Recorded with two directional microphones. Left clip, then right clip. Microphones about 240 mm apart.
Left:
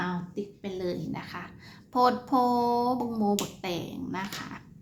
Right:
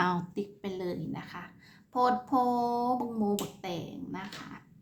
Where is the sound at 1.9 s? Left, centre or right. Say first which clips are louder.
Left 3 dB; centre.